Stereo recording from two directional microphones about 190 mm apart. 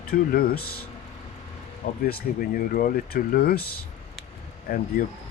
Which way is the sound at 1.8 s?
50° left (ahead or behind).